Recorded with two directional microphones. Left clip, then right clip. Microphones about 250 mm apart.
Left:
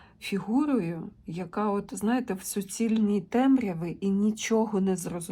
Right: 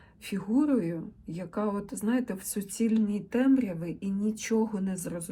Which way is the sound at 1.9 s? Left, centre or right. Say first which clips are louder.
Left 2 dB; centre.